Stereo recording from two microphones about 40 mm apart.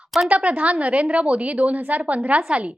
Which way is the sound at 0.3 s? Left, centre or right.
Right.